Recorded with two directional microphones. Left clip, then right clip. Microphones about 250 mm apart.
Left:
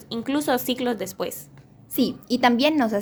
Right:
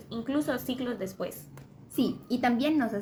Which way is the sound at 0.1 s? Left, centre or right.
Left.